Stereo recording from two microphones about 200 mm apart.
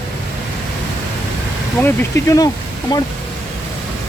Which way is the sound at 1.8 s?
15° left (ahead or behind).